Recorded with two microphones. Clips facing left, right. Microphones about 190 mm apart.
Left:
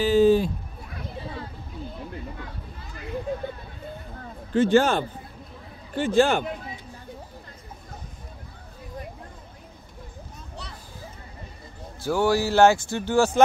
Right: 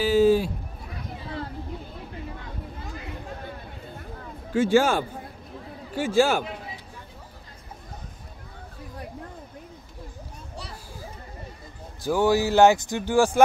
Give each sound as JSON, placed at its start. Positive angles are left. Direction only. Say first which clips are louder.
{"t": 0.0, "sound": "bleat", "louder": "left 1 dB", "side_deg": -10}
{"t": 4.5, "sound": "a man's voice", "louder": "left 1 dB", "side_deg": -10}
{"t": 12.0, "sound": "a man's voice", "louder": "right 1 dB", "side_deg": -15}